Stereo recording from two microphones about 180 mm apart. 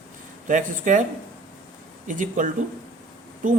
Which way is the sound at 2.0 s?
45° right (ahead or behind).